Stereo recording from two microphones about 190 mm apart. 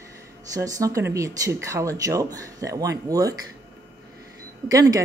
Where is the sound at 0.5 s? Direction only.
15° right (ahead or behind).